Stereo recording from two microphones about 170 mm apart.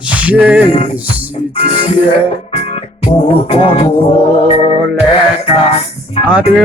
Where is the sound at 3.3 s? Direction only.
35° left (ahead or behind).